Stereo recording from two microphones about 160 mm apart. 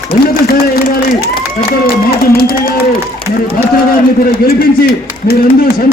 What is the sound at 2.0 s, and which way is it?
Speech, 70° left (ahead or behind).